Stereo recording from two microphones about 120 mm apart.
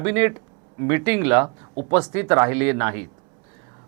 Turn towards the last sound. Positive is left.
turn(degrees=-20)  # may be behind; listen again after turning